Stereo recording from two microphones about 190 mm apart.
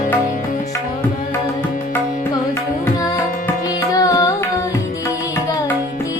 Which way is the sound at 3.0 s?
15° left (ahead or behind).